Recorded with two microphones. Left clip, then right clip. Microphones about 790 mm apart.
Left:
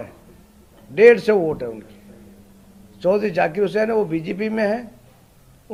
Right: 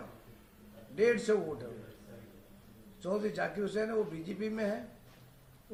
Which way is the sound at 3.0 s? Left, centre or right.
Left.